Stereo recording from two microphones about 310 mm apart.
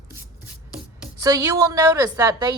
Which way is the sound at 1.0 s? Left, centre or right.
Centre.